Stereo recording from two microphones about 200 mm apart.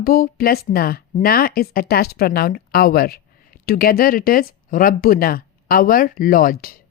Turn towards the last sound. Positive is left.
turn(degrees=45)  # may be behind; listen again after turning